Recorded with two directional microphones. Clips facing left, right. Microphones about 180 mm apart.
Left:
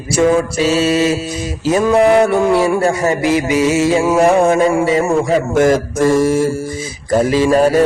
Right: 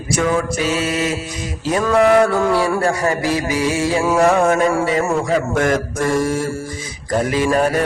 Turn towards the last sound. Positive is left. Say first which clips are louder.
# left 5 dB
turn(degrees=25)  # may be behind; listen again after turning